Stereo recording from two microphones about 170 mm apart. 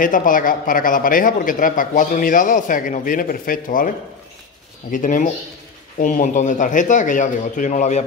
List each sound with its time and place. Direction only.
0.0 s a man's voice: 55° left (ahead or behind)
4.9 s a man's voice: 50° left (ahead or behind)